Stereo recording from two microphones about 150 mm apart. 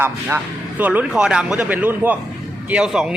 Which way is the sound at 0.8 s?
10° right (ahead or behind).